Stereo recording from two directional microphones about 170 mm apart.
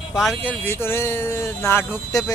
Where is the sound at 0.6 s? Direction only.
15° left (ahead or behind).